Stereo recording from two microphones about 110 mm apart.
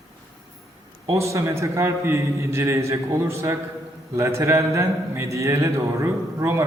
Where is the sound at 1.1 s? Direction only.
30° right (ahead or behind).